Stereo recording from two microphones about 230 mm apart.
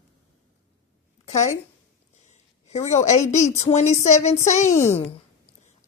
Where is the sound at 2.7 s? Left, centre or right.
Left.